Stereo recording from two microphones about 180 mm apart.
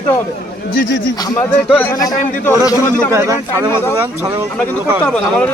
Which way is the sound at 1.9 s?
20° left (ahead or behind).